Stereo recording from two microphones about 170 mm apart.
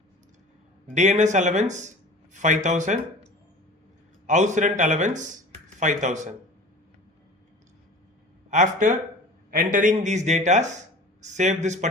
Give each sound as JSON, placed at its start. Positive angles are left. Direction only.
{"t": 0.9, "sound": "speech", "side_deg": -45}
{"t": 4.3, "sound": "speech", "side_deg": -45}
{"t": 8.4, "sound": "speech", "side_deg": -45}